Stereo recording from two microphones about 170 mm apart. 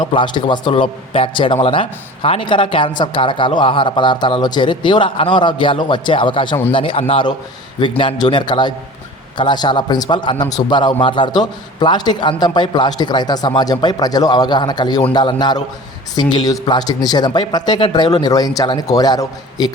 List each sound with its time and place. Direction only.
0.0 s a man's voice: 30° left (ahead or behind)